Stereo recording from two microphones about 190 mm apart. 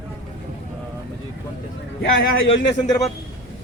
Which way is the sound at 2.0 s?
85° left.